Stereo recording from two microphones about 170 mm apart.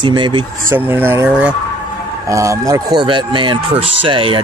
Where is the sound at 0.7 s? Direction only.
15° right (ahead or behind).